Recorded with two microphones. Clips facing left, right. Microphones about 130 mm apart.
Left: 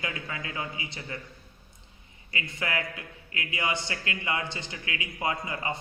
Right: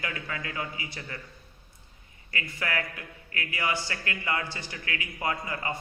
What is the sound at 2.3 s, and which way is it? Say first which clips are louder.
A man's voice: even; 20° left (ahead or behind).